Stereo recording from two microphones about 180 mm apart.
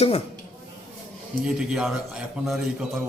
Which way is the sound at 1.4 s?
5° right (ahead or behind).